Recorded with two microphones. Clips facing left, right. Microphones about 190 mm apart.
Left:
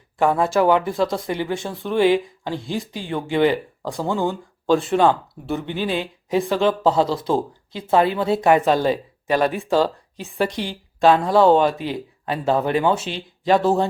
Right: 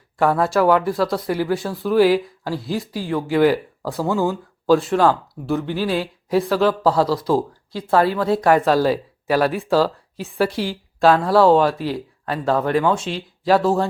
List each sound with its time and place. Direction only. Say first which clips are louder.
0.2 s speech: right 1 dB; centre (ahead or behind)
7.7 s a woman's voice: even; 20° left (ahead or behind)
8.6 s speech: right 1 dB; centre (ahead or behind)